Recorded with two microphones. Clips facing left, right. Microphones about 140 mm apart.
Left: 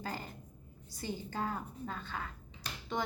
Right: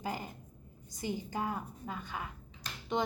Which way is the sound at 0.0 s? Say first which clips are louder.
Right 3 dB; 15° right (ahead or behind).